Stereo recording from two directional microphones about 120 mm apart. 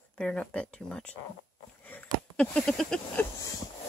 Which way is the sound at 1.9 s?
10° left (ahead or behind).